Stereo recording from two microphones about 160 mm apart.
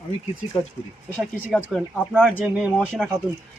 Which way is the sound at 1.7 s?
10° right (ahead or behind).